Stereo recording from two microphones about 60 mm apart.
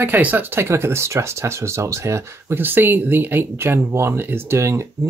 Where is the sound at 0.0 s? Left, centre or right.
Right.